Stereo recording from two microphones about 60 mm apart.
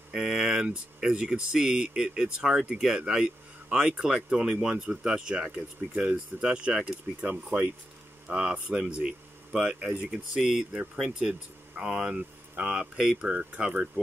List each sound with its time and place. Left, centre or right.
0.1 s a sound: centre
1.0 s speech: centre
12.7 s speech: centre